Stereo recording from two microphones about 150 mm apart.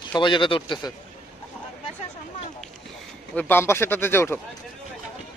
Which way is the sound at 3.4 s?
15° left (ahead or behind).